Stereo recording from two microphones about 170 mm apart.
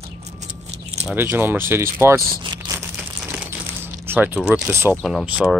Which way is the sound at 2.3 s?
30° right (ahead or behind).